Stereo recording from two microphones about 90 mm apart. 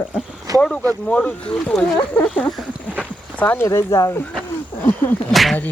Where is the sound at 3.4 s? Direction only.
25° left (ahead or behind).